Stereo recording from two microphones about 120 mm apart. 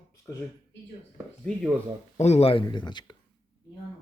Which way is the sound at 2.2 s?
60° left (ahead or behind).